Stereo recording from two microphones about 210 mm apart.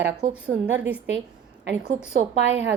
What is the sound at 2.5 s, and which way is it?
Speech, 60° right (ahead or behind).